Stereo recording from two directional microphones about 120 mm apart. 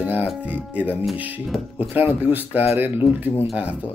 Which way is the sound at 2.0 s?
15° right (ahead or behind).